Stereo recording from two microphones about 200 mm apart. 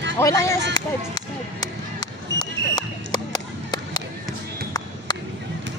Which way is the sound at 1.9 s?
20° left (ahead or behind).